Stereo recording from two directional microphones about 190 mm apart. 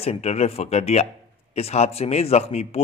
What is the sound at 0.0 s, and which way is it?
A man's voice, 35° left (ahead or behind).